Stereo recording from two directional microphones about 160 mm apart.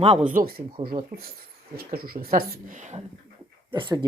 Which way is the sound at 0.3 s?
65° right (ahead or behind).